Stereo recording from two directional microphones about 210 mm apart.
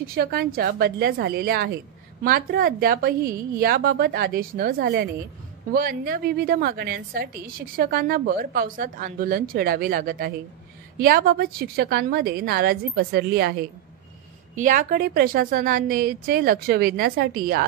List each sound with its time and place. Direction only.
0.0 s a woman's voice: 45° right (ahead or behind)
14.5 s a woman's voice: 35° right (ahead or behind)